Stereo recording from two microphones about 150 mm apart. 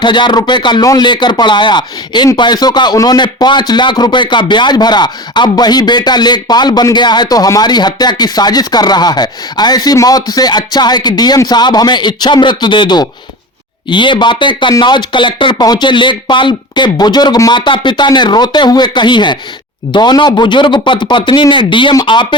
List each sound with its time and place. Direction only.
0.0 s speech: 30° left (ahead or behind)